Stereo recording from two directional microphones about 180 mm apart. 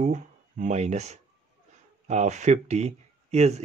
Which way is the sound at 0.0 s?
40° right (ahead or behind).